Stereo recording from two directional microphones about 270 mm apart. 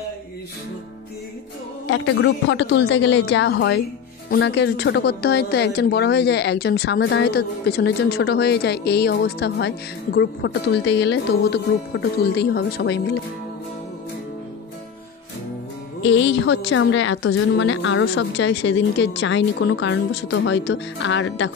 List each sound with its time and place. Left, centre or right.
1.9 s a woman's voice: left
16.0 s a woman's voice: left